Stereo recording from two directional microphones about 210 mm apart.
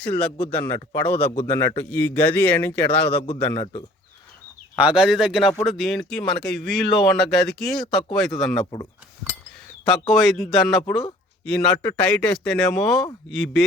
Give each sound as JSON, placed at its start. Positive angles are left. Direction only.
{"t": 0.0, "sound": "a man's voice", "side_deg": 5}
{"t": 4.8, "sound": "speech", "side_deg": -5}
{"t": 10.1, "sound": "speech", "side_deg": 0}